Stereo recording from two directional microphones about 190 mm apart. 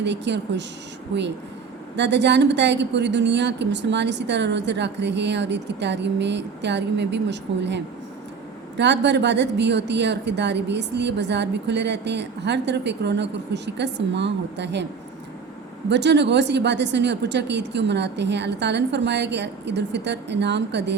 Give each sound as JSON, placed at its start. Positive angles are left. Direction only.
{"t": 0.0, "sound": "speech", "side_deg": -65}
{"t": 8.8, "sound": "speech", "side_deg": -65}
{"t": 15.9, "sound": "speech", "side_deg": -65}